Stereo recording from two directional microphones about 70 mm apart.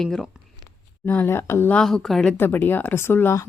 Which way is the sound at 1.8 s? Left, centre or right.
Centre.